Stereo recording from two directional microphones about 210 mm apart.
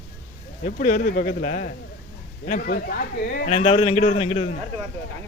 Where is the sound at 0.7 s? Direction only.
40° left (ahead or behind).